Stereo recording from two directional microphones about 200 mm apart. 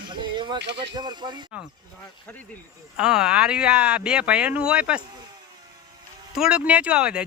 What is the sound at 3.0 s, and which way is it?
Speech, 5° right (ahead or behind).